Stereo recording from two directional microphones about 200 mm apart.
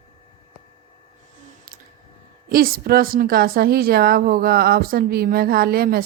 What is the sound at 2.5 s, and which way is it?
Speech, 45° right (ahead or behind).